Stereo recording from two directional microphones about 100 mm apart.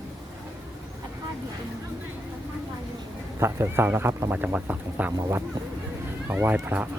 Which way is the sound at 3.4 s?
25° right (ahead or behind).